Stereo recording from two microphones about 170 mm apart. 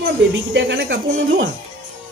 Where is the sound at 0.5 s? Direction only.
90° right.